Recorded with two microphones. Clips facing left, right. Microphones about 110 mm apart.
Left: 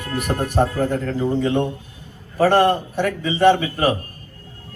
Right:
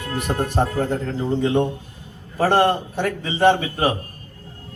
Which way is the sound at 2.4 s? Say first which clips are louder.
Left 2 dB; 25° right (ahead or behind).